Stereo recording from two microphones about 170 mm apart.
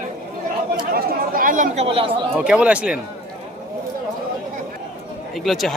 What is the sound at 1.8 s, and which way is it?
Speech, 30° right (ahead or behind).